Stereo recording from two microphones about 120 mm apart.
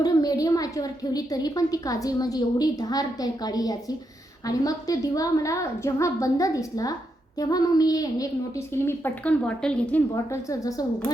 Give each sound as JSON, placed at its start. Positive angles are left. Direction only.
{"t": 0.0, "sound": "a child's voice", "side_deg": 30}
{"t": 10.2, "sound": "a woman's voice", "side_deg": 25}